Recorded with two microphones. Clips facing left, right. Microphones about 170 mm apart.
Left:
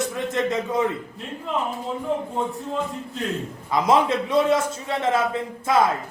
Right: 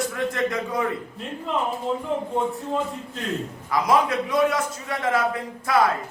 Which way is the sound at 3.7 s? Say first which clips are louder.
Left 1 dB; 25° left (ahead or behind).